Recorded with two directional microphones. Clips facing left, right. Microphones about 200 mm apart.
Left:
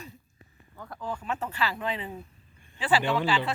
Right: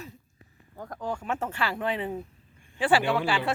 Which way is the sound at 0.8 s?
45° right (ahead or behind).